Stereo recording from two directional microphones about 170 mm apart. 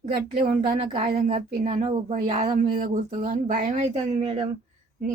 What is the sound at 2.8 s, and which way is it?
Speech, 50° right (ahead or behind).